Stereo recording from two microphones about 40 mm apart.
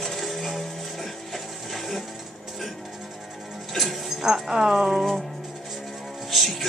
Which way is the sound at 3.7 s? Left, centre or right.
Centre.